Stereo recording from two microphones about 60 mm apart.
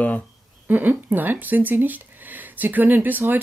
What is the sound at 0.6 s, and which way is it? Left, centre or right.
Speech, right.